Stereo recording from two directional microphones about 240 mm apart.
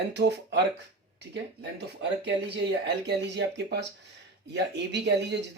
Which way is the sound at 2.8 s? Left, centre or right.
Right.